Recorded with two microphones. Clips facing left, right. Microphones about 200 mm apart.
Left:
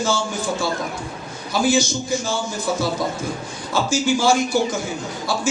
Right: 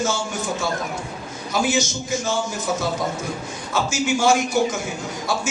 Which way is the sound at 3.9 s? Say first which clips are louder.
Left 1 dB; 35° left (ahead or behind).